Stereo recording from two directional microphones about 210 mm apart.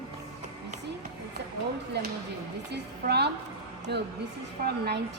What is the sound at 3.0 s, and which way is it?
A woman's voice, 50° right (ahead or behind).